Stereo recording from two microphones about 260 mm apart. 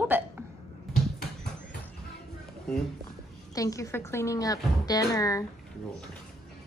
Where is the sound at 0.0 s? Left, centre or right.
Centre.